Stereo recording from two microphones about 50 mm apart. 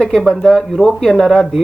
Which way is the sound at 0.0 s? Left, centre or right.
Centre.